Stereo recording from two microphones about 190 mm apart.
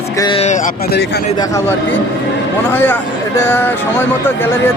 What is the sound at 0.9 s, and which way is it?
Speech, 60° left (ahead or behind).